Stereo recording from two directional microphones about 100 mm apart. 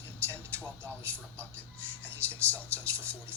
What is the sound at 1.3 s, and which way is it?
Speech, 15° left (ahead or behind).